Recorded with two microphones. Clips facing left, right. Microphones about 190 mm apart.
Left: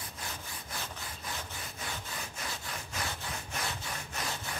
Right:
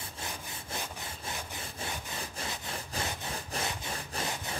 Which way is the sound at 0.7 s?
25° right (ahead or behind).